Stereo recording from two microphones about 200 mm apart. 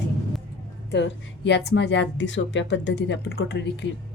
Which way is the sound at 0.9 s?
60° left (ahead or behind).